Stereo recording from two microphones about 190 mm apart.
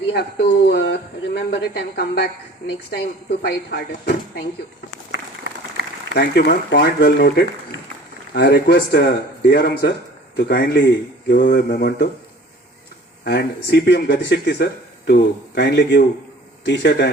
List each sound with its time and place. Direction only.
0.1 s speech: 60° left (ahead or behind)
5.1 s a sound: 65° right (ahead or behind)
6.1 s speech: 55° left (ahead or behind)
13.2 s speech: 60° left (ahead or behind)